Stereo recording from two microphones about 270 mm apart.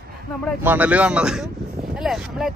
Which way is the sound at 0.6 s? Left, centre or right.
Centre.